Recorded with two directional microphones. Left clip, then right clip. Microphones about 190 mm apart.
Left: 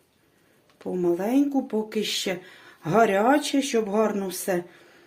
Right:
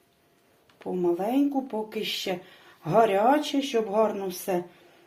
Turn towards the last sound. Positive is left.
turn(degrees=45)  # may be behind; listen again after turning